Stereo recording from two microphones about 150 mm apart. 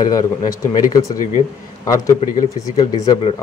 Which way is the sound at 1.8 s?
20° left (ahead or behind).